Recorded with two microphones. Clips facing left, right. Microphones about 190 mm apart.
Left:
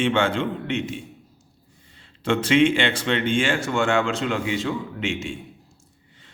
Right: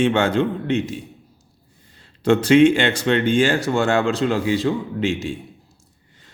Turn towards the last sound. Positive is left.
turn(degrees=-35)  # may be behind; listen again after turning